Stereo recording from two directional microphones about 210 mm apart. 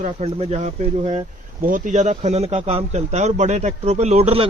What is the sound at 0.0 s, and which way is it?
A man's voice, 30° right (ahead or behind).